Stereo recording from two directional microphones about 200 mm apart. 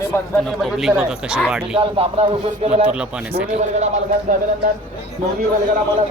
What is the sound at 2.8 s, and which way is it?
Speech, 5° right (ahead or behind).